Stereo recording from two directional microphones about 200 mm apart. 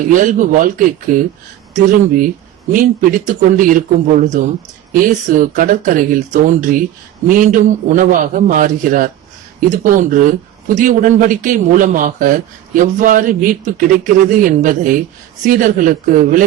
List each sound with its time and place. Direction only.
0.1 s a man's voice: 40° right (ahead or behind)